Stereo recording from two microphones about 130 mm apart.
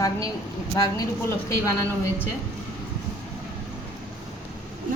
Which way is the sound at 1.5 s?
20° left (ahead or behind).